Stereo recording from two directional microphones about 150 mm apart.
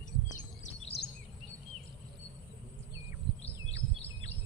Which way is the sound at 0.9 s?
90° left.